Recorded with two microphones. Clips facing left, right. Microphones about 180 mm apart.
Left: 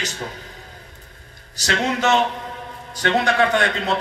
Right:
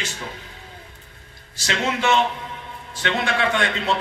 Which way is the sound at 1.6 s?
40° left (ahead or behind).